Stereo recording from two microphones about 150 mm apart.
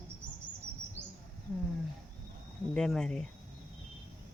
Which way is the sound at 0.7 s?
15° right (ahead or behind).